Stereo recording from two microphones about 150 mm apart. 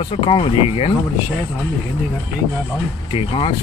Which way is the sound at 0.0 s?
40° left (ahead or behind).